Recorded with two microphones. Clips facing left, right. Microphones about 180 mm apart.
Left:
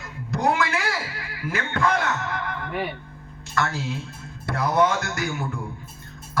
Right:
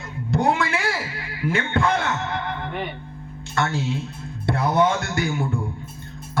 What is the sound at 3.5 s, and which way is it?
Speech, 25° right (ahead or behind).